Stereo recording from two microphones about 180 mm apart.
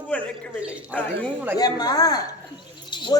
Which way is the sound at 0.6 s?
5° right (ahead or behind).